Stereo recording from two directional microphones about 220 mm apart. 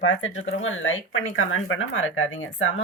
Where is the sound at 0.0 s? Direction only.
60° left (ahead or behind).